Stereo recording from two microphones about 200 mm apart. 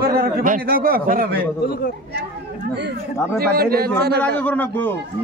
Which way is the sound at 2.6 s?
60° right (ahead or behind).